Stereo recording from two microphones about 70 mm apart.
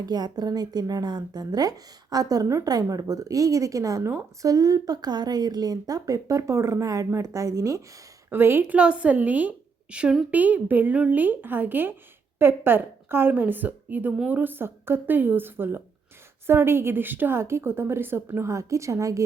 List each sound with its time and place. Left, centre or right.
0.0 s a woman's voice: right
8.3 s a woman's voice: right
8.7 s a woman's voice: centre; by 19.2 s right